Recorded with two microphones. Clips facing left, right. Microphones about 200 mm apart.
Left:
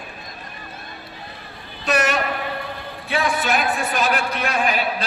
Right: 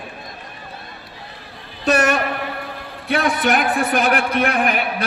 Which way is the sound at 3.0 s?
55° right (ahead or behind).